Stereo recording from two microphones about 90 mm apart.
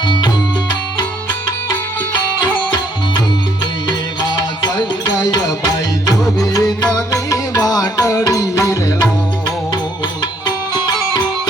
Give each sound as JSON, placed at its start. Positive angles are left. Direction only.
{"t": 0.0, "sound": "music", "side_deg": 55}
{"t": 2.1, "sound": "music", "side_deg": 55}
{"t": 3.8, "sound": "music", "side_deg": 50}
{"t": 10.4, "sound": "music", "side_deg": 50}